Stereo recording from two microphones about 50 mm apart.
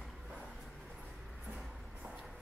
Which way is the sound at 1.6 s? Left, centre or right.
Centre.